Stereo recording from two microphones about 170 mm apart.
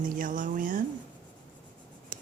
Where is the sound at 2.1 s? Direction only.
50° right (ahead or behind).